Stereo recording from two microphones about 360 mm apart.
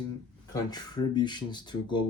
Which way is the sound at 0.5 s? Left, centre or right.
Centre.